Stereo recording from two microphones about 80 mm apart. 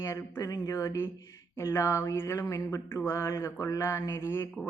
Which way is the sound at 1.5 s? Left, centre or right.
Left.